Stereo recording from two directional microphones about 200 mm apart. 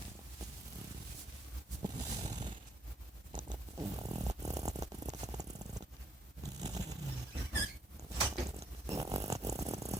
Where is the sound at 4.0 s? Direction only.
15° right (ahead or behind).